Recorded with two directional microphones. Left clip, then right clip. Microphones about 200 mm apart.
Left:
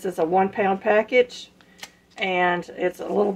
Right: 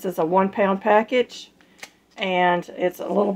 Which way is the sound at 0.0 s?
30° right (ahead or behind).